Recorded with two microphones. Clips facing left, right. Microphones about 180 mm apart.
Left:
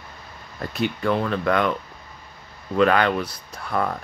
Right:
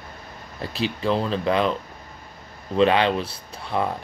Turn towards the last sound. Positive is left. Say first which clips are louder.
# even
turn(degrees=-25)  # may be behind; listen again after turning